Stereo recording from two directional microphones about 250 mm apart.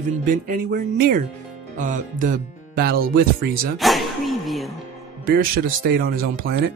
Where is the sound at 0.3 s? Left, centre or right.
Right.